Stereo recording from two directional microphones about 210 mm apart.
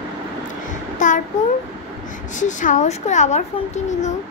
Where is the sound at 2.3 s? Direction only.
35° left (ahead or behind).